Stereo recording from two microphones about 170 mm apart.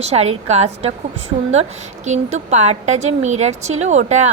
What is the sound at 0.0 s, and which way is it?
Speech, 40° right (ahead or behind).